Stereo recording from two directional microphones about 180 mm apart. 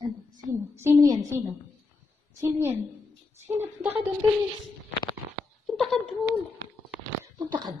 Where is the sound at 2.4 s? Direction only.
15° right (ahead or behind).